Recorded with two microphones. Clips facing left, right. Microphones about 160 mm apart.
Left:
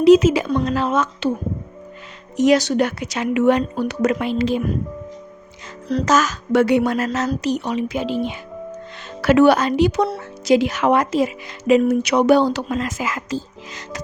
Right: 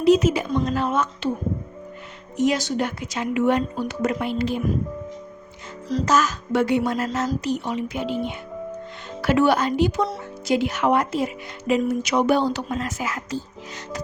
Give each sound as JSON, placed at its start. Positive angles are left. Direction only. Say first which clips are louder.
{"t": 0.0, "sound": "speech", "louder": "left 5 dB", "side_deg": 90}
{"t": 2.4, "sound": "speech", "louder": "left 6 dB", "side_deg": 80}
{"t": 5.9, "sound": "speech", "louder": "left 3 dB", "side_deg": 75}
{"t": 9.2, "sound": "speech", "louder": "left 5 dB", "side_deg": 75}
{"t": 11.7, "sound": "speech", "louder": "left 6 dB", "side_deg": 70}